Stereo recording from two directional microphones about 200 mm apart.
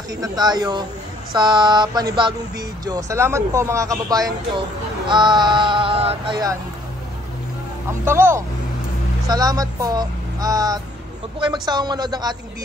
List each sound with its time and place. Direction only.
0.1 s speech: 20° right (ahead or behind)
8.0 s speech: 10° right (ahead or behind)